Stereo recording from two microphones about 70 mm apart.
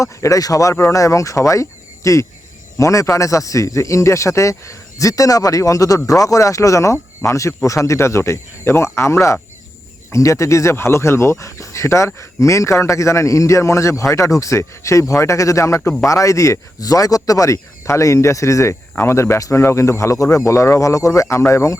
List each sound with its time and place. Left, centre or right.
0.0 s speech: left
16.0 s speech: left